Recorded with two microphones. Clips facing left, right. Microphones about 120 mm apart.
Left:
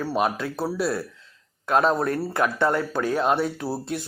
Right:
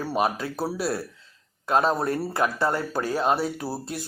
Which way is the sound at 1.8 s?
30° right (ahead or behind).